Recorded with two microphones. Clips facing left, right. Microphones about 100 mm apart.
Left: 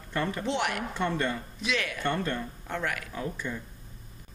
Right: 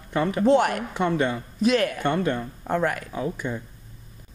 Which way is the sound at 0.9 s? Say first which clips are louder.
Right 6 dB; 15° right (ahead or behind).